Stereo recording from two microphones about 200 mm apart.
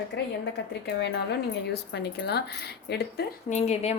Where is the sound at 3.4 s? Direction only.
35° left (ahead or behind).